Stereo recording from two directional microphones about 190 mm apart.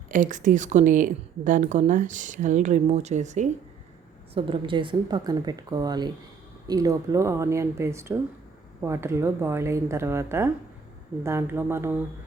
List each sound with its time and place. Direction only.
0.1 s a woman's voice: 45° right (ahead or behind)
4.4 s a woman's voice: 25° right (ahead or behind); by 12.0 s 10° right (ahead or behind)